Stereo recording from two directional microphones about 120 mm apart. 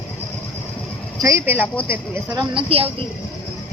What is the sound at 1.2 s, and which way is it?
Speech, 20° right (ahead or behind).